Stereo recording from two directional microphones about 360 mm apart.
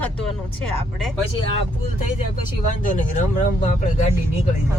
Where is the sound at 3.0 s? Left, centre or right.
Left.